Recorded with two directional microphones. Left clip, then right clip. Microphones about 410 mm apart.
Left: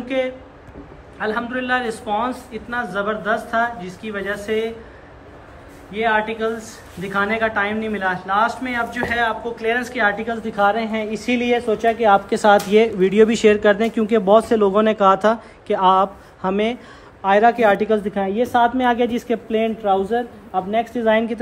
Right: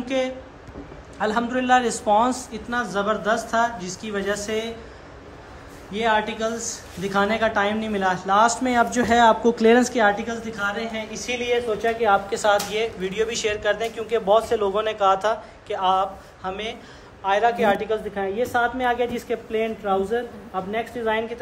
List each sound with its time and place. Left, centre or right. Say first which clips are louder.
0.0 s speech: left 2 dB; centre
5.9 s a man's voice: left 3 dB; centre